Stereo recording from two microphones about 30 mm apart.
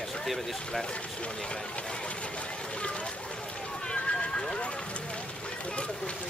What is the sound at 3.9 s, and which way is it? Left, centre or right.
Horse, left.